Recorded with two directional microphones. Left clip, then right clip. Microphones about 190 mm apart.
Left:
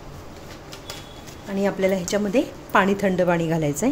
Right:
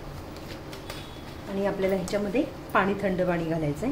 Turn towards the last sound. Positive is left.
turn(degrees=55)  # may be behind; listen again after turning